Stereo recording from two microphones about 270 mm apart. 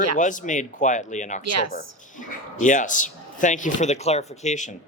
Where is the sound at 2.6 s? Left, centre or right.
Left.